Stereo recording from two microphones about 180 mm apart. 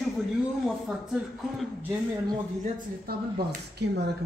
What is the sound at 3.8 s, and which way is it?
Speech, 65° right (ahead or behind).